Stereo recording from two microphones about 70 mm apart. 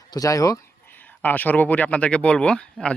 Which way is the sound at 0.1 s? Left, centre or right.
Left.